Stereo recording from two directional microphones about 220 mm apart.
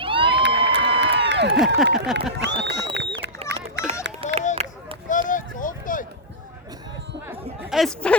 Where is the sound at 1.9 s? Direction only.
5° right (ahead or behind).